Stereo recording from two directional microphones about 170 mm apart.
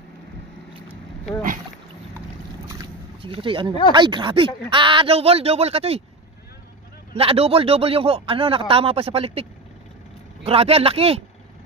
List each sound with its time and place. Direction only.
3.2 s speech: 30° right (ahead or behind)
7.2 s speech: 35° right (ahead or behind)